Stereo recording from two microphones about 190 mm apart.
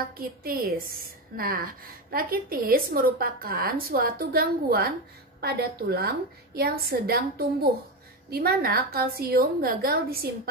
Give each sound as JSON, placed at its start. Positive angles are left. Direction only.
{"t": 0.2, "sound": "a woman's voice", "side_deg": -55}